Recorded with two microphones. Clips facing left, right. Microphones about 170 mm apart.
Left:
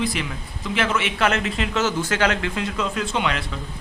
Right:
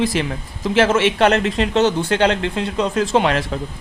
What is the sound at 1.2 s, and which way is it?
Speech, 35° right (ahead or behind).